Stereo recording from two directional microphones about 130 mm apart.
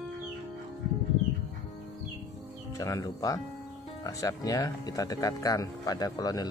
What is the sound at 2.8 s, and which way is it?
Speech, 25° left (ahead or behind).